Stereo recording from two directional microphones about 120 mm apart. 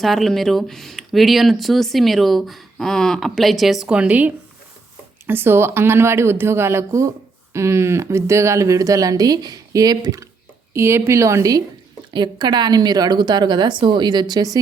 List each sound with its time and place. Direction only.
0.0 s speech: centre (ahead or behind); by 11.6 s 25° right (ahead or behind)
12.1 s a woman's voice: 40° right (ahead or behind)